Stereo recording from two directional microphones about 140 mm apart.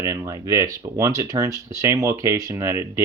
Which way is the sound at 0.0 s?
20° right (ahead or behind).